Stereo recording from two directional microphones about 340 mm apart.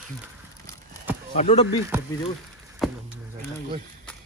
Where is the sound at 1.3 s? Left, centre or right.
Centre.